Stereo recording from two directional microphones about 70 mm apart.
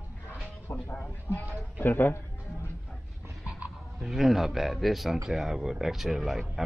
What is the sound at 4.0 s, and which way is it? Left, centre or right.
A man's voice, centre.